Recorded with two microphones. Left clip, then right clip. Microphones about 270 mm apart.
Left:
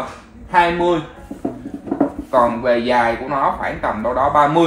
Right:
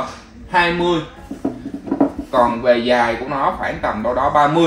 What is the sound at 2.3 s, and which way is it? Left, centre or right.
Speech, centre.